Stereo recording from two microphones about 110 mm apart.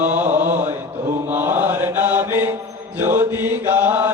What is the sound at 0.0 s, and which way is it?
Mantra, 15° right (ahead or behind).